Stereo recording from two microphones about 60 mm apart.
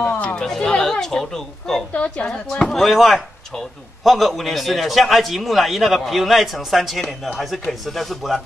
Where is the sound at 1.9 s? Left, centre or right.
Left.